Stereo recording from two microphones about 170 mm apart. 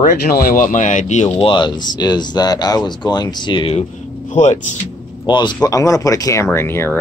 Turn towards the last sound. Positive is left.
turn(degrees=15)  # may be behind; listen again after turning